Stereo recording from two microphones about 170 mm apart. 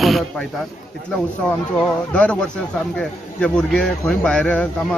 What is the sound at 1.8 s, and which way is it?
Speech, 5° left (ahead or behind).